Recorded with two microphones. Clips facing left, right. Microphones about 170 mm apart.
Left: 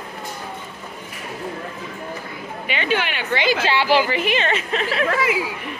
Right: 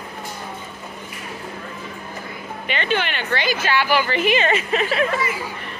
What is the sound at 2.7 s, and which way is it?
Speech, 10° left (ahead or behind).